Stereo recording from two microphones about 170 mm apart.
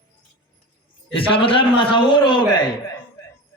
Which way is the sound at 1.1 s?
30° left (ahead or behind).